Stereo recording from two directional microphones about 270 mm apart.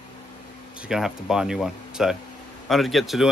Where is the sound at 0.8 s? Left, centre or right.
Centre.